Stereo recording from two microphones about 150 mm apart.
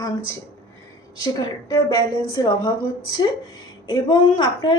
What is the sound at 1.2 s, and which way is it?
A woman's voice, 25° left (ahead or behind).